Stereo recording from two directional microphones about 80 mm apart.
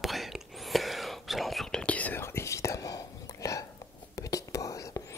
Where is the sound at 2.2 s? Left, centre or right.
Left.